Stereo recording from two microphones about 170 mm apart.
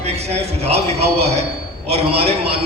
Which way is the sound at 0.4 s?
40° right (ahead or behind).